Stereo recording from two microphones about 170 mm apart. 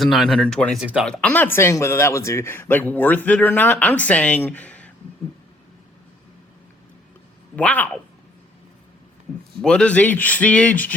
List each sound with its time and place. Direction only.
0.0 s speech: centre (ahead or behind)
7.5 s speech: 10° left (ahead or behind)
9.6 s speech: 5° left (ahead or behind)